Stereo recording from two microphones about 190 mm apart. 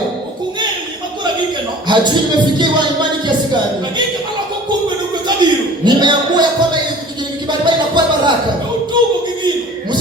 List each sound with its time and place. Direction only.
1.9 s speech: 25° right (ahead or behind)
5.4 s speech: 25° right (ahead or behind)
7.6 s a sound: 25° right (ahead or behind)